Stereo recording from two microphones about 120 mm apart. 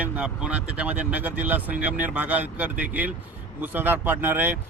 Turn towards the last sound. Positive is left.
turn(degrees=-15)  # may be behind; listen again after turning